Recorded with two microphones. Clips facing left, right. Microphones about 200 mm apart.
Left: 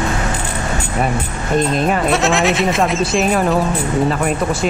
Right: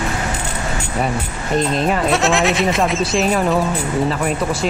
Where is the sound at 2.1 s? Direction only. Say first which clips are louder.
Left 1 dB; centre (ahead or behind).